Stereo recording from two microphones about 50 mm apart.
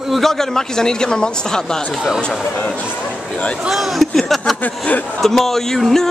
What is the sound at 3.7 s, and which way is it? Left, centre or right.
A man's voice, centre.